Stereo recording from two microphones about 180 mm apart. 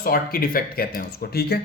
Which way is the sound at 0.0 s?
55° left (ahead or behind).